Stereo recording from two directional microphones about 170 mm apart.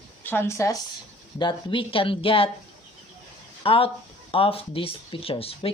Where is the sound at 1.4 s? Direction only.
30° left (ahead or behind).